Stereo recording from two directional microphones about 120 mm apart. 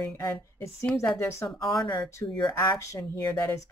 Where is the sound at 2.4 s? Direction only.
35° left (ahead or behind).